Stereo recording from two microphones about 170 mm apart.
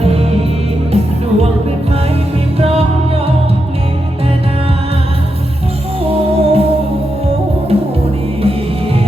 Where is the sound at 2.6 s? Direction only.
35° right (ahead or behind).